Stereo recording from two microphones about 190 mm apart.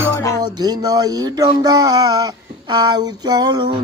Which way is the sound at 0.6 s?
20° right (ahead or behind).